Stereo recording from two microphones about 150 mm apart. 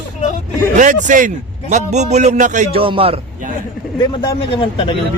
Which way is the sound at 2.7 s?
40° right (ahead or behind).